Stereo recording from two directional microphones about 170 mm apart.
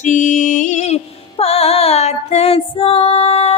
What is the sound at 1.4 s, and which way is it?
Female singing, 35° left (ahead or behind).